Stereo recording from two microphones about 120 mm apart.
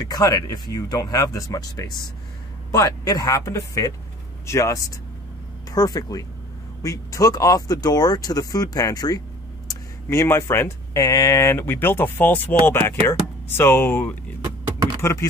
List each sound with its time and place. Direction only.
0.0 s speech: 30° left (ahead or behind)
10.0 s speech: 20° left (ahead or behind)